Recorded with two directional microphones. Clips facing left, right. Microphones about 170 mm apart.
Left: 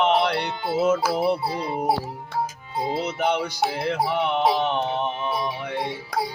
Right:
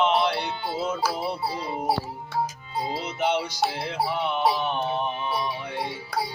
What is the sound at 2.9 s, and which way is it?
Music, 60° left (ahead or behind).